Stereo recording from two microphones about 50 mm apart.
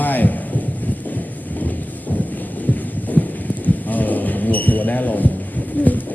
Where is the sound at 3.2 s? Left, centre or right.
Left.